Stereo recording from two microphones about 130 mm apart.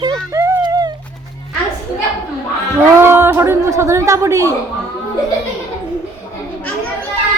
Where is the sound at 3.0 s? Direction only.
20° right (ahead or behind).